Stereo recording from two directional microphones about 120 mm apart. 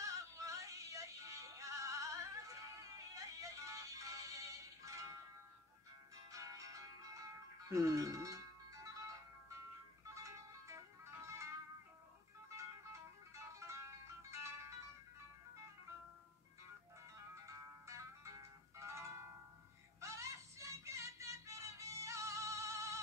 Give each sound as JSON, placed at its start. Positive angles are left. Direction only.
{"t": 0.0, "sound": "music", "side_deg": -25}
{"t": 6.3, "sound": "music", "side_deg": -30}
{"t": 12.5, "sound": "music", "side_deg": -25}
{"t": 17.5, "sound": "music", "side_deg": -25}